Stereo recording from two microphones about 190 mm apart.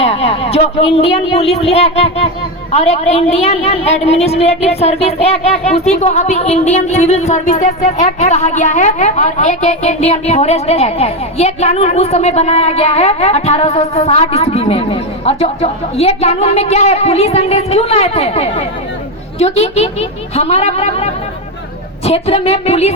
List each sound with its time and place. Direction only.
0.0 s a woman's voice: 30° left (ahead or behind)